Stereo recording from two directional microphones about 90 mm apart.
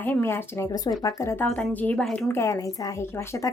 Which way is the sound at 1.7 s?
15° left (ahead or behind).